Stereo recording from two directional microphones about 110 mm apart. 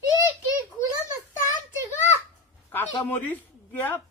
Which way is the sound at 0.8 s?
25° left (ahead or behind).